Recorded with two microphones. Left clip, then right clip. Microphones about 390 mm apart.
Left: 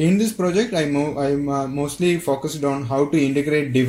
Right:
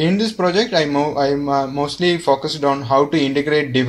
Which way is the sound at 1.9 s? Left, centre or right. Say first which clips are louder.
Right 1 dB; right.